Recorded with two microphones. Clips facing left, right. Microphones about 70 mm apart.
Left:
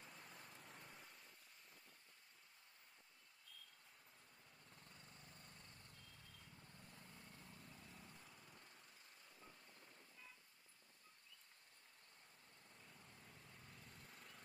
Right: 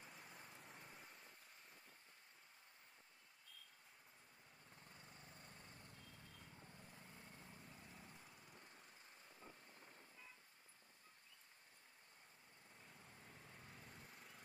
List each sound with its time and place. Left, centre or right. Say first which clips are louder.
0.0 s vehicle: even; centre
4.6 s vehicle: right 2 dB; centre
9.4 s a sound: right 3 dB; centre
12.7 s vehicle: right 2 dB; centre